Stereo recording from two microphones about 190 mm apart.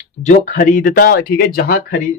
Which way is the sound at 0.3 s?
45° left (ahead or behind).